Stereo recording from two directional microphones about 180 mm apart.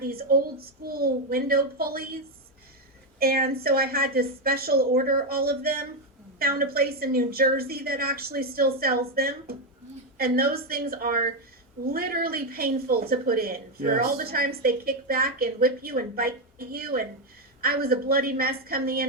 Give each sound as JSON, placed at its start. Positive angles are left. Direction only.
{"t": 0.0, "sound": "speech", "side_deg": -55}
{"t": 3.2, "sound": "speech", "side_deg": -55}